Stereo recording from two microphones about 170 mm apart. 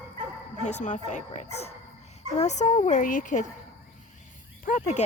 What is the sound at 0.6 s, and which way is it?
Speech, 45° left (ahead or behind).